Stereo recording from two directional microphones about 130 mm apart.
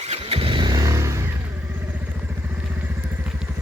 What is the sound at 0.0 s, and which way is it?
Vehicle, 50° right (ahead or behind).